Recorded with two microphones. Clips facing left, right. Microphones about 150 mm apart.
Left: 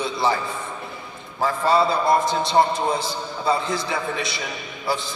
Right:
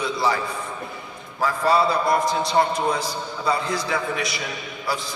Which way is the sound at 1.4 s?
25° left (ahead or behind).